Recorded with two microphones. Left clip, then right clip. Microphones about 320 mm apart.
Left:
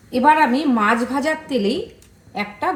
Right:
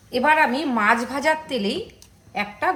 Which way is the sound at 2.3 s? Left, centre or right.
Right.